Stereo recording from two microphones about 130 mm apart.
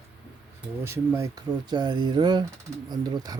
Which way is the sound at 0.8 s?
20° right (ahead or behind).